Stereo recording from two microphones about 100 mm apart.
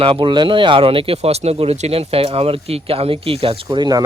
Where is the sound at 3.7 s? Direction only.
45° right (ahead or behind).